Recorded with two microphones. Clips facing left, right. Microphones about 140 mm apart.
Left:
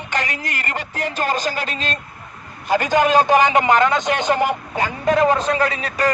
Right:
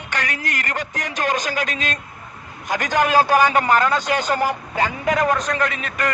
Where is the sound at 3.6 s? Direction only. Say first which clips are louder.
Left 2 dB; 25° left (ahead or behind).